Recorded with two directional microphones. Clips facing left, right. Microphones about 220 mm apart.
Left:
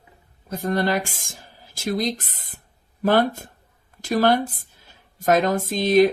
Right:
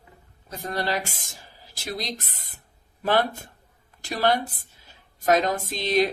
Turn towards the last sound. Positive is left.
turn(degrees=50)  # may be behind; listen again after turning